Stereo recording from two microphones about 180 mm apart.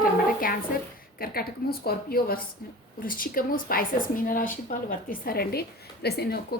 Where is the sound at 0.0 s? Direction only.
55° left (ahead or behind).